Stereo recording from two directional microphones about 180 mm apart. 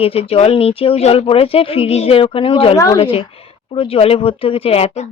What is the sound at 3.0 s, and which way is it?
Speech, 35° left (ahead or behind).